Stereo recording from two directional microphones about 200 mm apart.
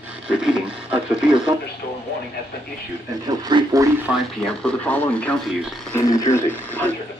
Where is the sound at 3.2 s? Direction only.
20° right (ahead or behind).